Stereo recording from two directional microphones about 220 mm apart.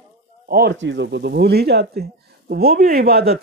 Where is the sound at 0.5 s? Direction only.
45° right (ahead or behind).